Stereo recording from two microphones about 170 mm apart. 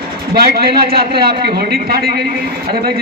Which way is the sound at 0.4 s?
65° right (ahead or behind).